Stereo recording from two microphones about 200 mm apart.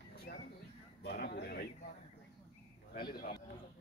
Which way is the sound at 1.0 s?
55° left (ahead or behind).